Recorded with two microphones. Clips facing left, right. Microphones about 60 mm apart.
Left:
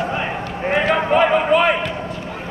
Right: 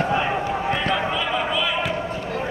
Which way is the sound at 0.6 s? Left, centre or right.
Left.